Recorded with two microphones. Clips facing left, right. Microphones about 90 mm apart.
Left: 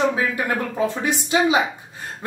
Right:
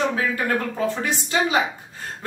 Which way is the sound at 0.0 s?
15° left (ahead or behind).